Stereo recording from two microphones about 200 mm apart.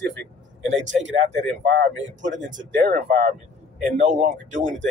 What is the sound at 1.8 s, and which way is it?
Speech, 65° right (ahead or behind).